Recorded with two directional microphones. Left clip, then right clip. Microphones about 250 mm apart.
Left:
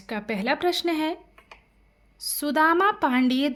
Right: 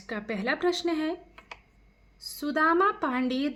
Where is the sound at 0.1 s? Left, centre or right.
Left.